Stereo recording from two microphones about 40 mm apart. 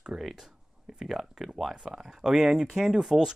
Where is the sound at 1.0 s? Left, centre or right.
Centre.